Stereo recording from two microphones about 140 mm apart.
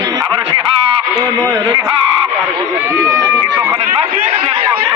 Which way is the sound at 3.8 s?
45° right (ahead or behind).